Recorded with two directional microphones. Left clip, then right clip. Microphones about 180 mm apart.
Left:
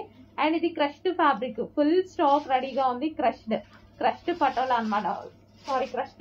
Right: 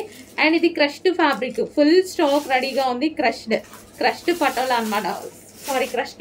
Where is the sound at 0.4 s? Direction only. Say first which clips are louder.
Right 7 dB; 25° right (ahead or behind).